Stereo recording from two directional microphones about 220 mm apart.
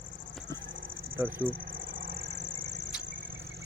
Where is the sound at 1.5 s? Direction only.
40° right (ahead or behind).